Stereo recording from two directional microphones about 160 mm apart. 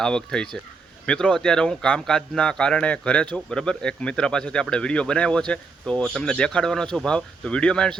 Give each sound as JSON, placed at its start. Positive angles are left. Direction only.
{"t": 0.0, "sound": "a man's voice", "side_deg": 5}